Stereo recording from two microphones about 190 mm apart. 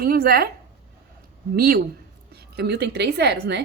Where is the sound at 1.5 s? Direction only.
50° right (ahead or behind).